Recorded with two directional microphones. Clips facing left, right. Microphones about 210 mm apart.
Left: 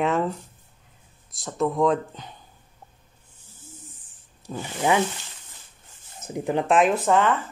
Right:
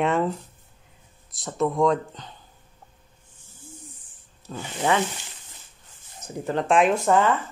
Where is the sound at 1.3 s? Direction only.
Centre (ahead or behind).